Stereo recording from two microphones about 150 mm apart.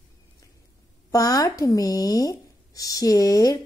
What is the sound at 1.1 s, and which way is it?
Speech, 25° left (ahead or behind).